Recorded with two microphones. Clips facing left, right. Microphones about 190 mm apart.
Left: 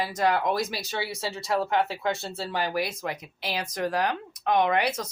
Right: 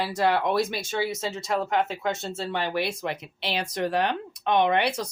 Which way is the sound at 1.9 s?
25° right (ahead or behind).